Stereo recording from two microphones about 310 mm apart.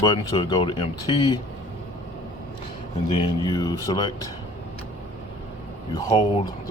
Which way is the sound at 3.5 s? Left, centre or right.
Centre.